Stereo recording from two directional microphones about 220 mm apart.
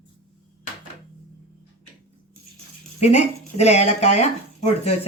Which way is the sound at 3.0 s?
30° left (ahead or behind).